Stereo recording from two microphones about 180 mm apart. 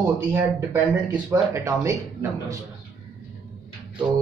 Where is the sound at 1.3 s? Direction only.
15° right (ahead or behind).